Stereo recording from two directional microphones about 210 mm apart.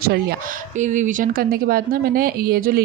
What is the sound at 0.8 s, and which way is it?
Speech, 35° right (ahead or behind).